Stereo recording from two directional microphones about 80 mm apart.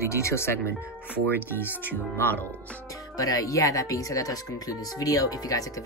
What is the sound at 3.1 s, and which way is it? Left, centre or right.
Speech, left.